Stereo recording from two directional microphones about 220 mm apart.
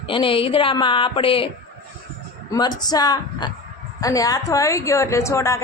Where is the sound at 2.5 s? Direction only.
20° left (ahead or behind).